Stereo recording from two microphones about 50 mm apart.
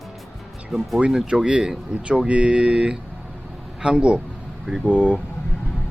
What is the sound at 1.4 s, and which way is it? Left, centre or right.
Speech, centre.